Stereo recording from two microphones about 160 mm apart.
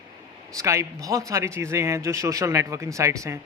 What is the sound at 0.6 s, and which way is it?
A man's voice, 20° right (ahead or behind).